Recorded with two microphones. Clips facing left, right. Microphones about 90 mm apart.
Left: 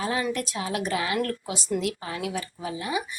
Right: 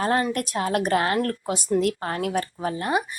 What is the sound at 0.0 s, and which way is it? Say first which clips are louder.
A woman's voice: right 4 dB; 50° right (ahead or behind).